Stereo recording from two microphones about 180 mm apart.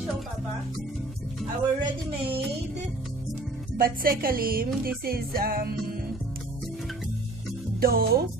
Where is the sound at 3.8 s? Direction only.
55° right (ahead or behind).